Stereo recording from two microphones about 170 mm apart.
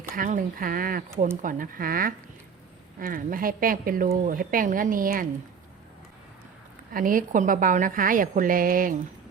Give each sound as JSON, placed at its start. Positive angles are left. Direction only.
{"t": 0.1, "sound": "a woman's voice", "side_deg": -55}
{"t": 6.9, "sound": "a woman's voice", "side_deg": -55}